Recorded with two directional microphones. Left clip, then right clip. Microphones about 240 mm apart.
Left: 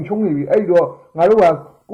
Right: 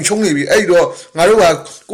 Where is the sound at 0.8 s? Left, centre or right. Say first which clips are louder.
Right 2 dB; right.